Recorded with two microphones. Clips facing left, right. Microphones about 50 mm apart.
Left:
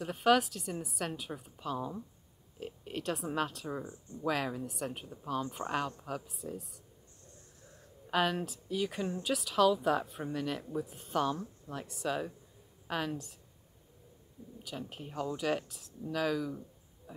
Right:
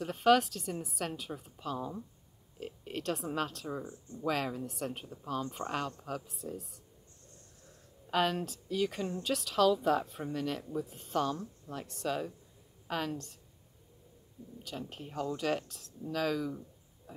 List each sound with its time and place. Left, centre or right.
0.0 s speech: centre
8.1 s speech: centre
14.6 s speech: centre